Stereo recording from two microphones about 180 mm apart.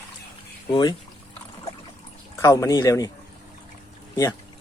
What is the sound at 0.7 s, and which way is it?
Speech, 25° left (ahead or behind).